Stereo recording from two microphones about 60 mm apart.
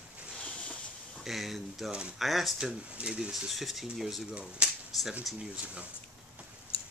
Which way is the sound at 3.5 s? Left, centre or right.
Centre.